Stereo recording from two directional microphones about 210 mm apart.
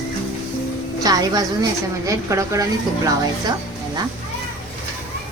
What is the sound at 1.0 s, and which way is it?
A woman's voice, 15° right (ahead or behind).